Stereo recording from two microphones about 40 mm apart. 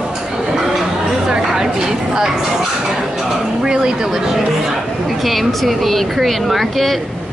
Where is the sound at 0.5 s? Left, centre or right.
Centre.